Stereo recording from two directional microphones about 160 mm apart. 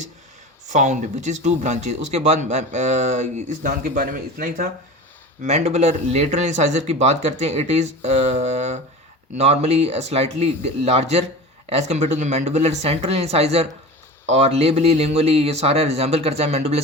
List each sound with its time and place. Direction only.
0.7 s speech: 45° right (ahead or behind)
5.4 s a man's voice: 45° right (ahead or behind)